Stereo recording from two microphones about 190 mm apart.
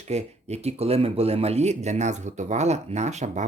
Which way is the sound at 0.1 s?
35° right (ahead or behind).